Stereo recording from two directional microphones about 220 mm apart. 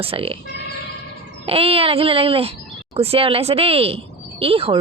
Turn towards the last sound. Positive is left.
turn(degrees=-25)  # may be behind; listen again after turning